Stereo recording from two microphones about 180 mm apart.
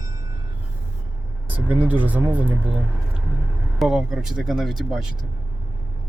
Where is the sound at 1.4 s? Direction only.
10° right (ahead or behind).